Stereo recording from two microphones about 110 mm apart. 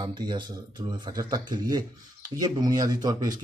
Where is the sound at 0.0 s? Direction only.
40° right (ahead or behind).